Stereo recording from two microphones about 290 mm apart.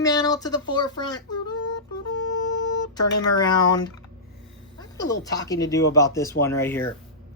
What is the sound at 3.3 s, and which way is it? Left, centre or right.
Speech, centre.